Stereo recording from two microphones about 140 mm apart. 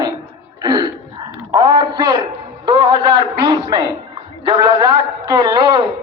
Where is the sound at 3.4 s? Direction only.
40° right (ahead or behind).